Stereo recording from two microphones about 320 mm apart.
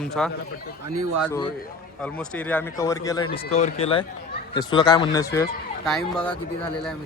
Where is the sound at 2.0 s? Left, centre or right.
Centre.